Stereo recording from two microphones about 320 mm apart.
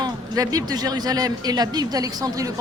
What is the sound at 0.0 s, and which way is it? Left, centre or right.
A man's voice, centre.